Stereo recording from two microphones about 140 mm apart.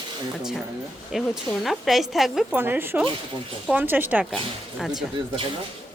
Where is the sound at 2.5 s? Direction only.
15° right (ahead or behind).